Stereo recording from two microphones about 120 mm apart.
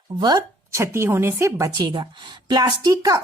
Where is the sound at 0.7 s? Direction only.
20° right (ahead or behind).